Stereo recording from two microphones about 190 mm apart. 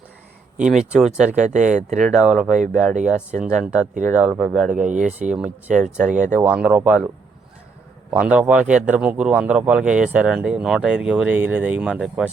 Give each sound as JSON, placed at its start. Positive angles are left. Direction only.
{"t": 0.5, "sound": "speech", "side_deg": -5}
{"t": 1.4, "sound": "speech", "side_deg": -40}
{"t": 2.0, "sound": "speech", "side_deg": 0}
{"t": 2.9, "sound": "speech", "side_deg": -40}
{"t": 3.6, "sound": "speech", "side_deg": -5}
{"t": 4.9, "sound": "speech", "side_deg": -40}
{"t": 5.2, "sound": "speech", "side_deg": -5}
{"t": 8.1, "sound": "speech", "side_deg": -5}